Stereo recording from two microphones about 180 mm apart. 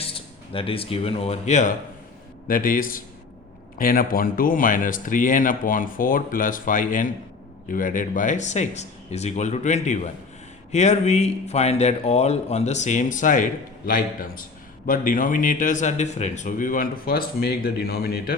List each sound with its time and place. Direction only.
0.0 s a man's voice: 30° left (ahead or behind); by 18.3 s 60° left (ahead or behind)